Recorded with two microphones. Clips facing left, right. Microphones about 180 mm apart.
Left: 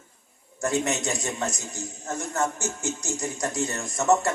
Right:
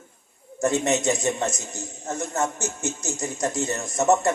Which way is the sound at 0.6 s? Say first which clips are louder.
Right 4 dB; 20° right (ahead or behind).